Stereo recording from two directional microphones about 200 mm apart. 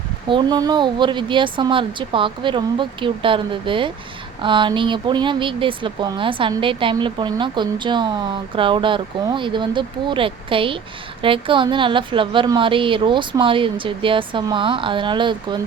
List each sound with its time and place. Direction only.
0.3 s speech: 20° right (ahead or behind)